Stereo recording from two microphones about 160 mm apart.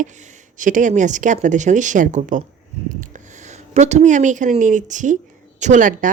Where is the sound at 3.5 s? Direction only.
45° right (ahead or behind).